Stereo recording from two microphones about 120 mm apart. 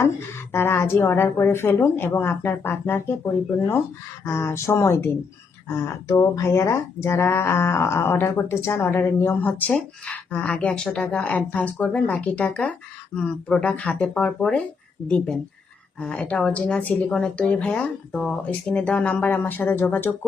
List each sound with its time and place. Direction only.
0.5 s speech: 20° left (ahead or behind)
4.3 s speech: 20° left (ahead or behind)